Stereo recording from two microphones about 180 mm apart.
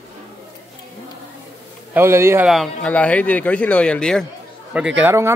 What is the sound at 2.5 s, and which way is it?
Speech, 5° left (ahead or behind).